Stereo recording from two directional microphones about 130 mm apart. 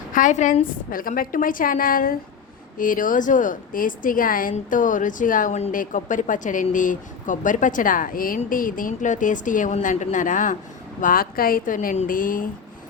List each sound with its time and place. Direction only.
0.1 s a woman's voice: 80° left